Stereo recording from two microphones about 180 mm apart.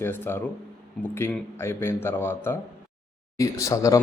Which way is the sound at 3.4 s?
15° left (ahead or behind).